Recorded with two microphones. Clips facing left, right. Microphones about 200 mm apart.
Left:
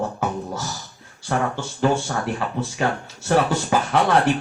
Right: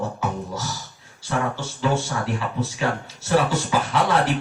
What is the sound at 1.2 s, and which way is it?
Speech, 55° left (ahead or behind).